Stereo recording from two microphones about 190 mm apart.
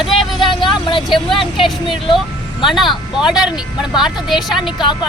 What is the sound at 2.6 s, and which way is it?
Speech, centre (ahead or behind).